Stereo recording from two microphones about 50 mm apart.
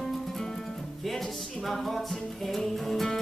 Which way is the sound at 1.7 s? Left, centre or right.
Centre.